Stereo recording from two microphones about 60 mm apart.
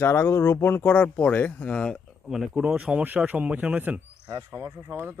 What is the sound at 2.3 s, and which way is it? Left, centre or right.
Speech, centre.